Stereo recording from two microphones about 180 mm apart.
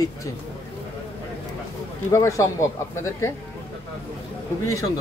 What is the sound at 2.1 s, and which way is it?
Speech, 15° left (ahead or behind).